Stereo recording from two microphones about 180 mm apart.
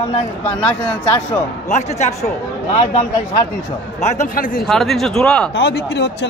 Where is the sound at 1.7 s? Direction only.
40° left (ahead or behind).